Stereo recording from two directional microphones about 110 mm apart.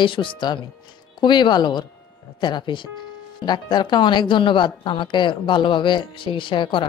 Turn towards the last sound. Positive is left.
turn(degrees=50)  # may be behind; listen again after turning